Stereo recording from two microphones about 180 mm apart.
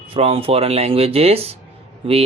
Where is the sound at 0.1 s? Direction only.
30° right (ahead or behind).